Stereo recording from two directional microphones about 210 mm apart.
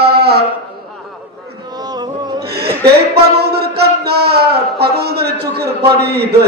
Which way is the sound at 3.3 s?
50° right (ahead or behind).